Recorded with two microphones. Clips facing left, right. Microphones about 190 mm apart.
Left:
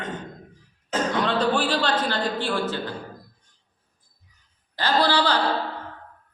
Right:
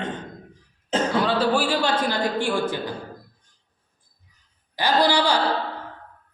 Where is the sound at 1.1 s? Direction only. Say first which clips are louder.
Right 1 dB; 5° right (ahead or behind).